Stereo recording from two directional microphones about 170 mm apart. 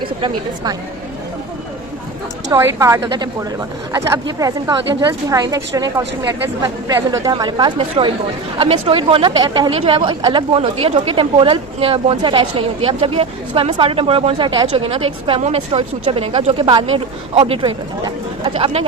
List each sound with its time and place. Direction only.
0.0 s a woman's voice: 25° right (ahead or behind)
2.5 s a woman's voice: 15° right (ahead or behind); by 18.9 s 35° right (ahead or behind)